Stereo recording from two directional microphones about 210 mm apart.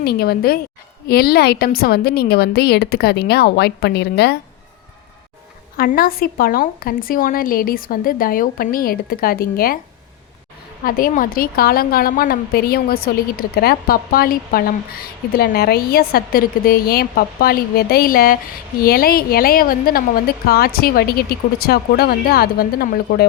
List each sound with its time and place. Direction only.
0.0 s a woman's voice: 50° left (ahead or behind)
5.7 s a woman's voice: 45° left (ahead or behind)
10.8 s a woman's voice: 40° left (ahead or behind)